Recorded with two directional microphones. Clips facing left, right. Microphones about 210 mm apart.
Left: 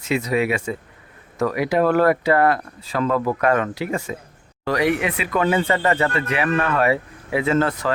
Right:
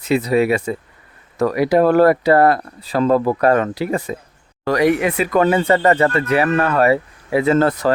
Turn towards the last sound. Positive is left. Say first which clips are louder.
# right 5 dB
turn(degrees=-40)  # may be behind; listen again after turning